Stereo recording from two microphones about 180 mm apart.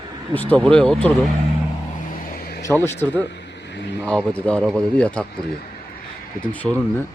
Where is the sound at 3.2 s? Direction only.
75° left (ahead or behind).